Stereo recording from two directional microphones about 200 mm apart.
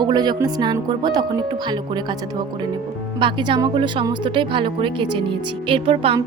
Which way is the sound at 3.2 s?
25° right (ahead or behind).